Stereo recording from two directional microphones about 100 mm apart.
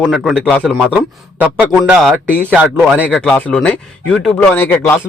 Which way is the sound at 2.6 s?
15° right (ahead or behind).